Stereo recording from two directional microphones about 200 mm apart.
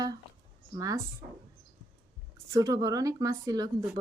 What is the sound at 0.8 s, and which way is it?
Speech, 15° right (ahead or behind).